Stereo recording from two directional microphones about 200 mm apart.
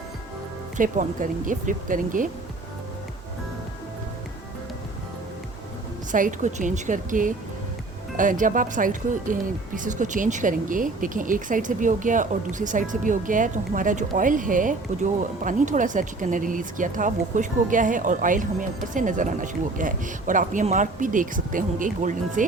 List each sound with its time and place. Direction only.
0.8 s speech: 40° right (ahead or behind)
6.1 s speech: 40° right (ahead or behind)